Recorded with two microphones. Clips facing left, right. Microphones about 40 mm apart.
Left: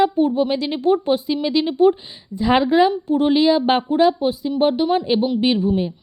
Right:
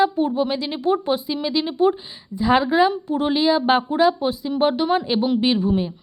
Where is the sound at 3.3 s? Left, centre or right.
Left.